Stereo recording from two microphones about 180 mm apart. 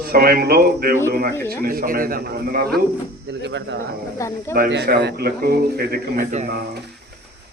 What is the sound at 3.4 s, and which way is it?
Speech, 75° right (ahead or behind).